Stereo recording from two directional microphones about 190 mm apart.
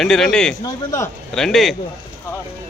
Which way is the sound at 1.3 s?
5° left (ahead or behind).